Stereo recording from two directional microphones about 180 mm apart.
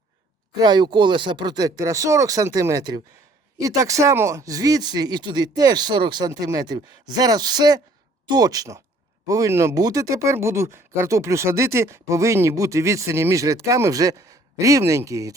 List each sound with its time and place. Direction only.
0.6 s speech: 25° right (ahead or behind)